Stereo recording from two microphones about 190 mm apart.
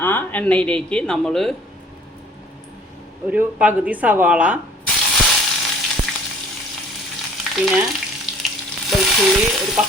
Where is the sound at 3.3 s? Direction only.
5° right (ahead or behind).